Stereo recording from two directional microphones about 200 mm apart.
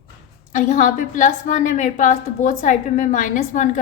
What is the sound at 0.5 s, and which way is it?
A woman's voice, 35° left (ahead or behind).